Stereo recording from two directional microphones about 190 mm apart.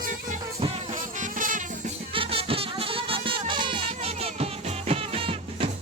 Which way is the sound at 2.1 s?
30° right (ahead or behind).